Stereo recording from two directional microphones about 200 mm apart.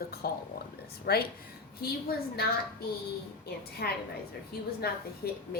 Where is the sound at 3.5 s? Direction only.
50° left (ahead or behind).